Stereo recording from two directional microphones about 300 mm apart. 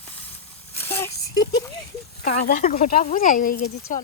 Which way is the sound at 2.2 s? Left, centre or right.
Left.